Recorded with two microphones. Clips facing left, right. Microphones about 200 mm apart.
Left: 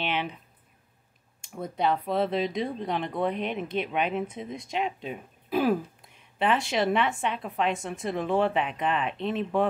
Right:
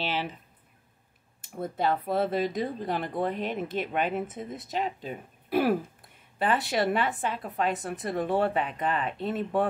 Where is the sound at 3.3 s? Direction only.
50° right (ahead or behind).